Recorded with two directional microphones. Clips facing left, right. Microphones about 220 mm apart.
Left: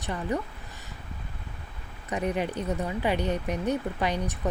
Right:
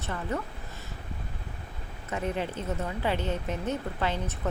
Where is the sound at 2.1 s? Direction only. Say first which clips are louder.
Left 3 dB; 15° left (ahead or behind).